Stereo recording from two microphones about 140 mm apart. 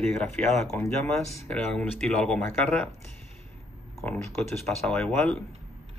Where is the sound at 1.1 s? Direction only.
5° left (ahead or behind).